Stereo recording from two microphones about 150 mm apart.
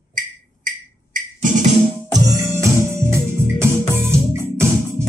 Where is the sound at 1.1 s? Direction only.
60° right (ahead or behind).